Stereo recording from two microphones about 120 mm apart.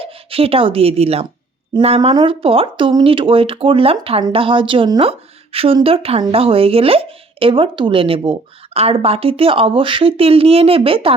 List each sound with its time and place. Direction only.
0.0 s speech: 50° right (ahead or behind)
2.0 s a woman's voice: 45° right (ahead or behind)